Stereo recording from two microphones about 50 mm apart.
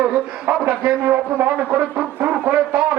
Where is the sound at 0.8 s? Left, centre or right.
Right.